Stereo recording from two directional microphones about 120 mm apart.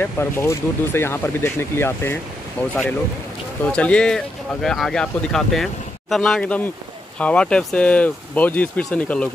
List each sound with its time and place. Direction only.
0.0 s speech: 20° left (ahead or behind)